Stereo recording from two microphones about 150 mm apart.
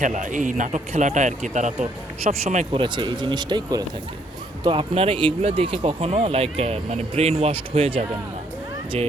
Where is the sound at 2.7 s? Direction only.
30° right (ahead or behind).